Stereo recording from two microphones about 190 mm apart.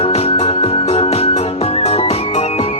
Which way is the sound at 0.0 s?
30° left (ahead or behind).